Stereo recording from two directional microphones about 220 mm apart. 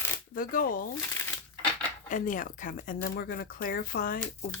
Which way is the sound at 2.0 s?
35° left (ahead or behind).